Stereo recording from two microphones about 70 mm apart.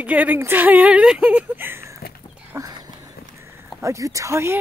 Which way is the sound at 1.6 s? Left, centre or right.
Right.